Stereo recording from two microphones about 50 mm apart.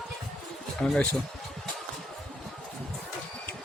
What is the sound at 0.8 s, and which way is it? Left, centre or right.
Speech, centre.